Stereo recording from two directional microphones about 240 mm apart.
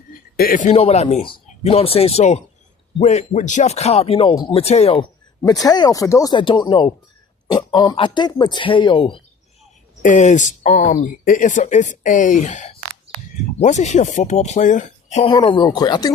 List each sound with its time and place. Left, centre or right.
0.3 s speech: left
5.4 s speech: centre
10.0 s speech: left; by 16.1 s centre